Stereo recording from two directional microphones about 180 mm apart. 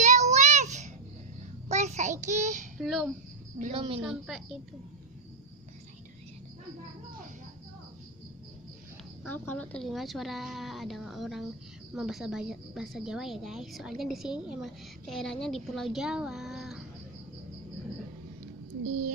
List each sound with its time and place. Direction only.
0.0 s child singing: 40° right (ahead or behind)
2.8 s a woman's voice: centre (ahead or behind)
3.8 s a woman's voice: 30° right (ahead or behind)
4.0 s a woman's voice: centre (ahead or behind)
9.2 s a woman's voice: 10° left (ahead or behind)